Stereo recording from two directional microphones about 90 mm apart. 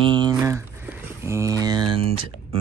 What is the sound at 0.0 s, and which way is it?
Speech, 65° right (ahead or behind).